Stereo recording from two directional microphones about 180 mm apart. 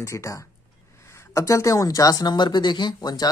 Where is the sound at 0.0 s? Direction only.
15° left (ahead or behind).